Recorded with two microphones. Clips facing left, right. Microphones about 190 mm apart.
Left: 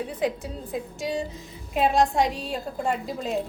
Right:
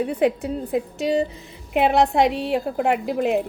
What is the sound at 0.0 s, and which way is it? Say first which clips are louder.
A woman's voice: right 7 dB; 65° right (ahead or behind).